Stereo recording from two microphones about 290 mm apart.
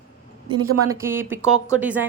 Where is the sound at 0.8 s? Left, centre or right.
Centre.